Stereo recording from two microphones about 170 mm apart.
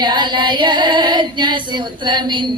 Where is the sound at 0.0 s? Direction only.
25° right (ahead or behind).